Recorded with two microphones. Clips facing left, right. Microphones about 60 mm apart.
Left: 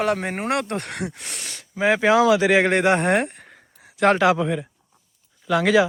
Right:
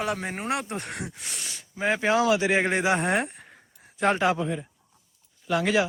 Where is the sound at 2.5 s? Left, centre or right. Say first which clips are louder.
Left 6 dB; left.